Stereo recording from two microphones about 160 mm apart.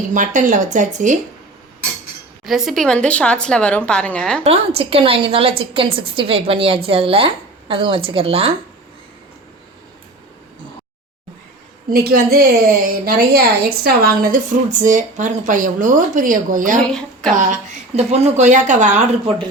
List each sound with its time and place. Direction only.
0.1 s a woman's voice: 55° right (ahead or behind)
2.4 s speech: centre (ahead or behind)
4.4 s a woman's voice: 35° right (ahead or behind)
11.9 s a woman's voice: 75° right (ahead or behind); by 16.8 s 55° right (ahead or behind)
16.8 s speech: 5° left (ahead or behind)
17.3 s a woman's voice: 50° right (ahead or behind)